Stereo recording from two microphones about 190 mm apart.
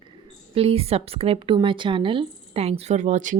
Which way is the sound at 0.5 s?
30° right (ahead or behind).